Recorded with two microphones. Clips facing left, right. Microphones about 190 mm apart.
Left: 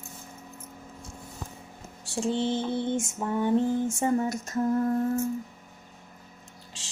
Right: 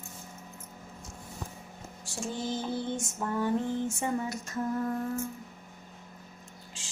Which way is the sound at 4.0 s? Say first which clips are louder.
Left 6 dB; 45° left (ahead or behind).